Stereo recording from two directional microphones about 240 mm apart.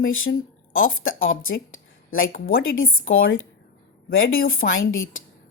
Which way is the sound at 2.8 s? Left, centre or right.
Left.